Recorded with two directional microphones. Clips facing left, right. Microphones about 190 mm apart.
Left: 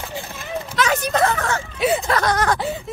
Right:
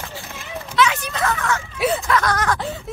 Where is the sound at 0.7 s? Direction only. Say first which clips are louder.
Left 1 dB; 40° left (ahead or behind).